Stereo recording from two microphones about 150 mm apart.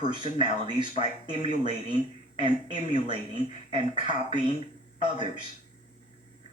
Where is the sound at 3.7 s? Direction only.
30° right (ahead or behind).